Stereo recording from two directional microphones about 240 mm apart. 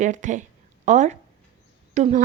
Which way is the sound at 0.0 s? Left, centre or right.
Right.